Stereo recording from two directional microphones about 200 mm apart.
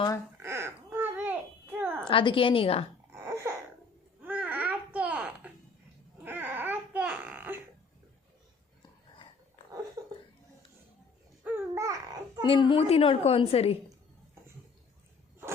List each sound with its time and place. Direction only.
0.4 s babbling: 10° right (ahead or behind)
2.0 s a woman's voice: 25° left (ahead or behind)
3.1 s laughter: 15° right (ahead or behind)
4.2 s babbling: 5° right (ahead or behind)
6.2 s baby cry: 10° right (ahead or behind)
11.4 s babbling: 10° right (ahead or behind)
12.4 s a woman's voice: 25° left (ahead or behind)